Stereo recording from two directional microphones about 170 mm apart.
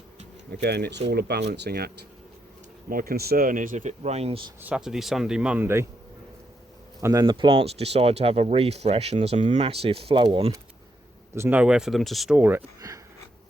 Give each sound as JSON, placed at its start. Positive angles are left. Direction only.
{"t": 0.5, "sound": "speech", "side_deg": -70}
{"t": 4.6, "sound": "speech", "side_deg": -5}
{"t": 7.0, "sound": "speech", "side_deg": -20}
{"t": 11.3, "sound": "speech", "side_deg": -10}